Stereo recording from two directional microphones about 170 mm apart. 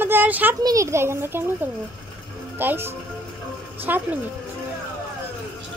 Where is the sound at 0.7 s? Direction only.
15° right (ahead or behind).